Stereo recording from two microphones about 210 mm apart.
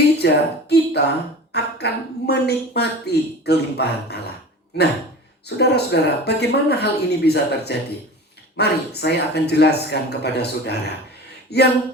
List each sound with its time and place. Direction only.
0.2 s a woman's voice: 50° left (ahead or behind)
5.5 s a woman's voice: 50° left (ahead or behind)